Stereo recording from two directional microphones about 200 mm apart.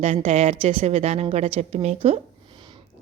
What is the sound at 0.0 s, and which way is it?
A woman's voice, 30° right (ahead or behind).